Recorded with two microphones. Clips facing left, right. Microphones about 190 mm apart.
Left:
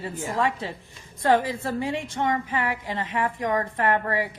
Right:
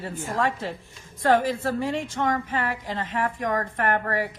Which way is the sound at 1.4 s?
20° left (ahead or behind).